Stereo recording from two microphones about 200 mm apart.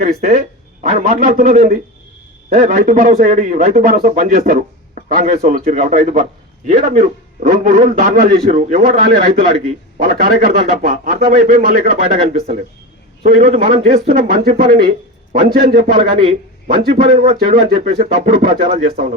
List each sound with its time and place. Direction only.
0.0 s a man's voice: 40° right (ahead or behind)
13.2 s a man's voice: 45° right (ahead or behind)